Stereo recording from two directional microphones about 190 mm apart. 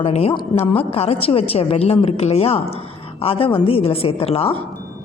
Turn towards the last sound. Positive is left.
turn(degrees=30)  # may be behind; listen again after turning